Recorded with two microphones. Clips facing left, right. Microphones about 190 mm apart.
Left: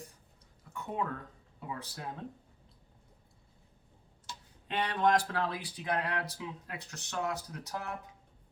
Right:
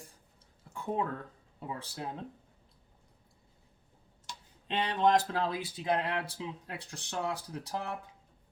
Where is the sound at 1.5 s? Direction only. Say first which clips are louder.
Right 2 dB; 30° right (ahead or behind).